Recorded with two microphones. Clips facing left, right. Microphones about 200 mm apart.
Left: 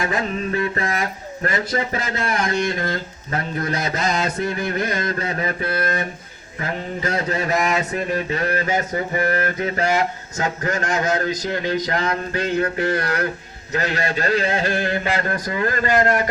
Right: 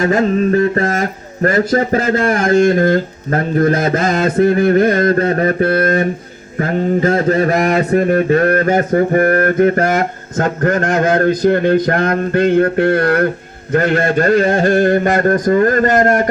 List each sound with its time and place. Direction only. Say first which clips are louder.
0.0 s mantra: right 10 dB; 45° right (ahead or behind)